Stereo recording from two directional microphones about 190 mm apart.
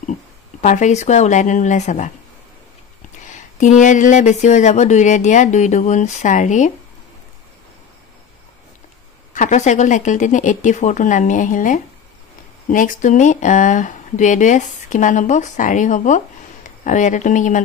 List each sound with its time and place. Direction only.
0.6 s speech: 40° left (ahead or behind)
3.3 s speech: 40° left (ahead or behind)
9.3 s speech: 40° left (ahead or behind)